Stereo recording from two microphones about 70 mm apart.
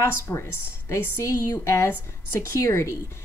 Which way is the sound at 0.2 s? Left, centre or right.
Left.